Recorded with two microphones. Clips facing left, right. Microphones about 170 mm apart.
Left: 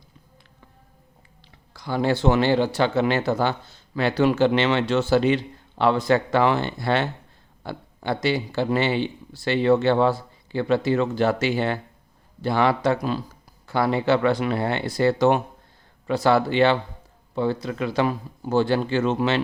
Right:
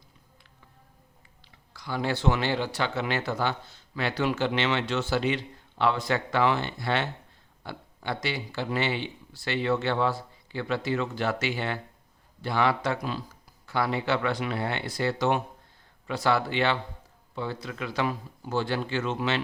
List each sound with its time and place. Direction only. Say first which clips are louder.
1.7 s speech: left 7 dB; 30° left (ahead or behind)